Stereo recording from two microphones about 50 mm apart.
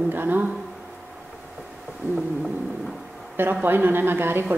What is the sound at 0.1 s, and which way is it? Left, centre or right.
Speech, right.